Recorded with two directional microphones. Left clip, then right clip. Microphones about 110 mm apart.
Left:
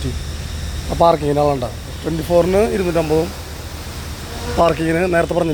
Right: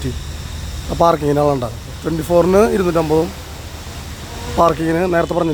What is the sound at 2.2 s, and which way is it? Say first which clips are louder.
Speech: right 2 dB; 70° right (ahead or behind).